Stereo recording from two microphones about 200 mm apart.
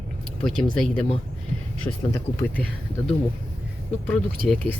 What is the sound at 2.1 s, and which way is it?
Speech, 10° left (ahead or behind).